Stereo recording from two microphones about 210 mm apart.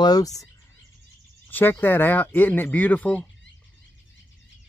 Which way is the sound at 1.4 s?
10° left (ahead or behind).